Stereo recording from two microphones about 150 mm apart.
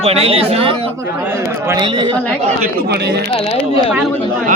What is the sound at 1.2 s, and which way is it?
Speech, 15° right (ahead or behind).